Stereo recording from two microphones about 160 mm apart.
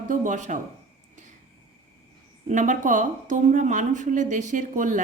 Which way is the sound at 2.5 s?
50° right (ahead or behind).